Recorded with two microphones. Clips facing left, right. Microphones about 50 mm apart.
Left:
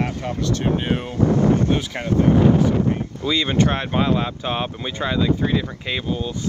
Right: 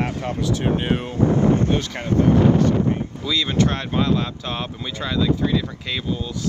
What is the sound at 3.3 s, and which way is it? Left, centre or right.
Speech, left.